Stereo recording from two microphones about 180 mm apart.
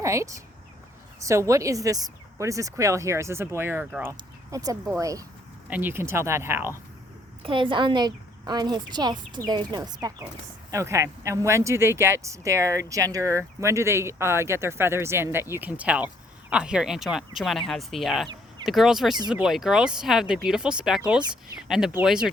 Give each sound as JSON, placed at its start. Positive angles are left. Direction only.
{"t": 0.0, "sound": "a woman's voice", "side_deg": -15}
{"t": 7.4, "sound": "a woman's voice", "side_deg": -30}